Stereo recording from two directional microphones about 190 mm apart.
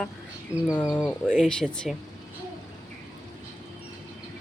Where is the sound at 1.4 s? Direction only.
5° left (ahead or behind).